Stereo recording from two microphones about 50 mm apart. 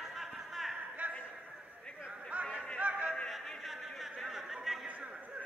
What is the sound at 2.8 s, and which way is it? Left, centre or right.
Music, right.